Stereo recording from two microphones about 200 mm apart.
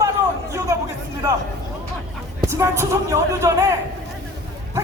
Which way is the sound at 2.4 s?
15° right (ahead or behind).